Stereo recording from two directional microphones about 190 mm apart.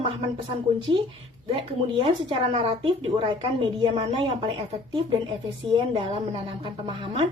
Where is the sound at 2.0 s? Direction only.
25° right (ahead or behind).